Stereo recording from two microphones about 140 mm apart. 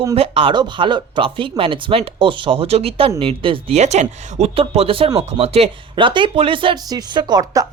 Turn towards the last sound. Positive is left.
turn(degrees=-30)  # may be behind; listen again after turning